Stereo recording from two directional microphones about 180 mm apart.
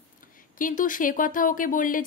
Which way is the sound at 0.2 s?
50° left (ahead or behind).